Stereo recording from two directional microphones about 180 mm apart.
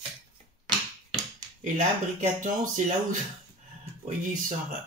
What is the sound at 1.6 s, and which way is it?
Speech, 45° right (ahead or behind).